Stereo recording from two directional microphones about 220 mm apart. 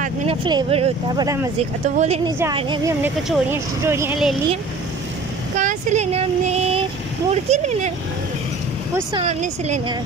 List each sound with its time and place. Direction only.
0.5 s speech: 25° right (ahead or behind)
1.6 s speech: 30° right (ahead or behind); by 4.4 s 5° right (ahead or behind)
5.6 s speech: 35° right (ahead or behind)
9.1 s speech: 30° right (ahead or behind)